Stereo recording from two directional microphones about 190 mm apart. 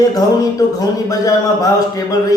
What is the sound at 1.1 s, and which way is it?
A man's voice, 15° left (ahead or behind).